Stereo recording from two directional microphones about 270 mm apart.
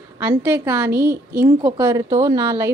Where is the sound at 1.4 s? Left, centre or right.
Centre.